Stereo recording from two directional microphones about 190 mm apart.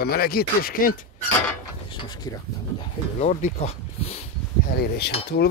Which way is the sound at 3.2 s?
40° left (ahead or behind).